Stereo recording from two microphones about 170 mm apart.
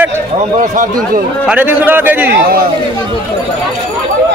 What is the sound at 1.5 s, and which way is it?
Speech, 10° right (ahead or behind).